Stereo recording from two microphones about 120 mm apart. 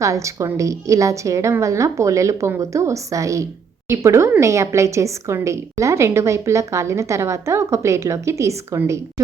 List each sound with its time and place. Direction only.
0.0 s a woman's voice: 25° right (ahead or behind)